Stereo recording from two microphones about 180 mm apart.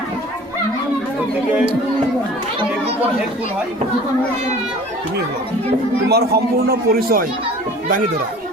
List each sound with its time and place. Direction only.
6.1 s a man's voice: 60° right (ahead or behind)